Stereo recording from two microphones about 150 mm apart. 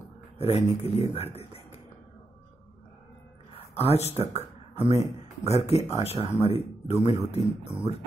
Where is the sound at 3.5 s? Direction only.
40° left (ahead or behind).